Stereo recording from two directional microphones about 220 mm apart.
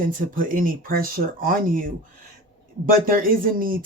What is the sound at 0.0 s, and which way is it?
Speech, 40° right (ahead or behind).